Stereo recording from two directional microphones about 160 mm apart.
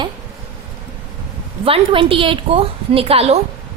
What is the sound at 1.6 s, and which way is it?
A woman's voice, 35° right (ahead or behind).